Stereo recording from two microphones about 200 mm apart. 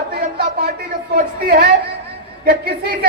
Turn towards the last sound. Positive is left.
turn(degrees=-50)  # may be behind; listen again after turning